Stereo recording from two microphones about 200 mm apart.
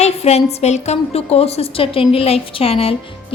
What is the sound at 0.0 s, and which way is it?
A woman's voice, 30° left (ahead or behind).